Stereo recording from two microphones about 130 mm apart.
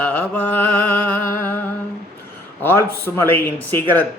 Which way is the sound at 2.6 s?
15° left (ahead or behind).